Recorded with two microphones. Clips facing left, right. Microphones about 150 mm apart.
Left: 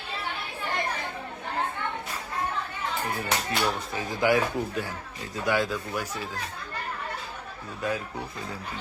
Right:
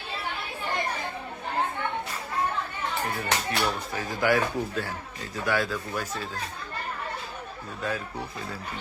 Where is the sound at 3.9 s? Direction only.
20° left (ahead or behind).